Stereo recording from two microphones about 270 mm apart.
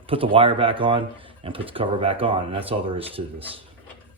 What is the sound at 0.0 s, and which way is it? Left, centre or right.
Speech, centre.